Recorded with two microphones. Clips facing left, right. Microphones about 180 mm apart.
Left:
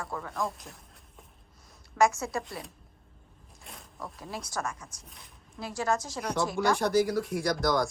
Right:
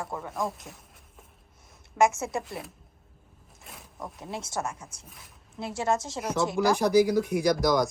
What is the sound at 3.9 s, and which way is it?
Speech, 20° right (ahead or behind).